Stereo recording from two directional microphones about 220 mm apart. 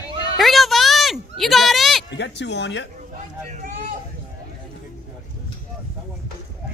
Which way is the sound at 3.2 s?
35° right (ahead or behind).